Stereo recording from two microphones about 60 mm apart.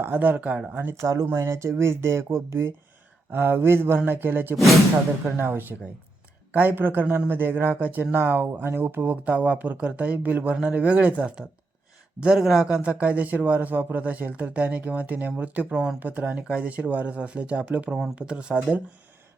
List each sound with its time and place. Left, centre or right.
0.0 s a man's voice: right
1.0 s speech: right
1.3 s speech: right
3.3 s a man's voice: right; by 18.6 s centre